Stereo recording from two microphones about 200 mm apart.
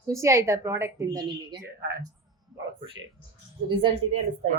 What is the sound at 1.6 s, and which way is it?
Speech, 55° right (ahead or behind).